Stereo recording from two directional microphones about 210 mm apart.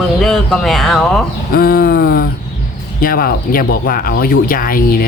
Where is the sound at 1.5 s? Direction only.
45° left (ahead or behind).